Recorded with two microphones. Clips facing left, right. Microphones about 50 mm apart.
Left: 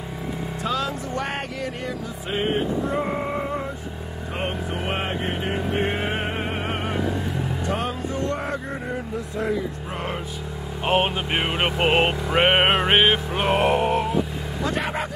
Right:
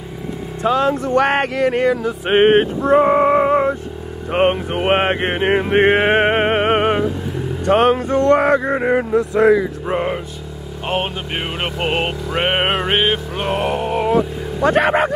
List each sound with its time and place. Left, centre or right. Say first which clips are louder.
0.7 s speech: right 10 dB; right
1.0 s music: right 12 dB; right
10.9 s a sound: even; centre
14.6 s music: right 12 dB; right